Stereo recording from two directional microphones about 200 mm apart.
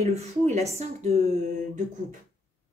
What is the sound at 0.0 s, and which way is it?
A woman's voice, 30° right (ahead or behind).